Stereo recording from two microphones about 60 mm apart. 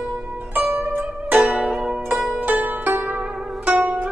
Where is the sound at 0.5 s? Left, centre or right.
Right.